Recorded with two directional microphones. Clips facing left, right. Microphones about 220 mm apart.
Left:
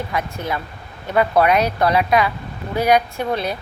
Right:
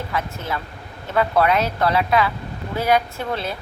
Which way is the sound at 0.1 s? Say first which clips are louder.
Left 2 dB; 15° left (ahead or behind).